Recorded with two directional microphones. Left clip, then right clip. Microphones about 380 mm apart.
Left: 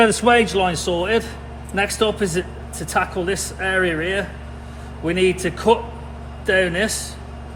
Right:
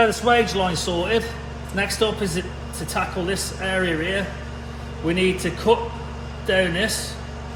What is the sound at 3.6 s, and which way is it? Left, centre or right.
A man's voice, left.